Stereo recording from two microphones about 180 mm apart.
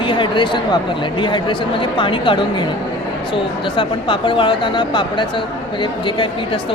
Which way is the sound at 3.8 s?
25° left (ahead or behind).